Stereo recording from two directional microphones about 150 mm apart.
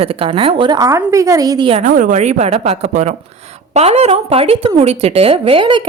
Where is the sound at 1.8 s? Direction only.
55° right (ahead or behind); by 5.8 s 35° right (ahead or behind).